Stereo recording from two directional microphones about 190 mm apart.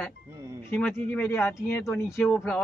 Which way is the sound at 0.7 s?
5° left (ahead or behind).